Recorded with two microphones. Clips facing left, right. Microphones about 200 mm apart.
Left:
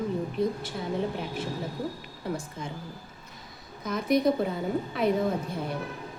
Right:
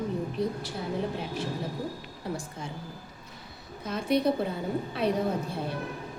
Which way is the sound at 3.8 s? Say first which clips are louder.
Left 2 dB; 30° right (ahead or behind).